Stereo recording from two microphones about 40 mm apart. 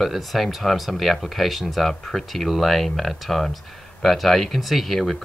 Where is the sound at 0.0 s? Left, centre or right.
Centre.